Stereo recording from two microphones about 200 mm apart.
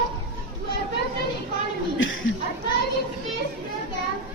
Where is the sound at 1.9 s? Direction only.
70° left (ahead or behind).